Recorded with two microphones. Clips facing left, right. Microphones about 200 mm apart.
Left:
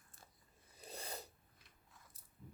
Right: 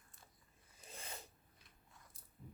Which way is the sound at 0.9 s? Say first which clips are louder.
Left 4 dB; 35° left (ahead or behind).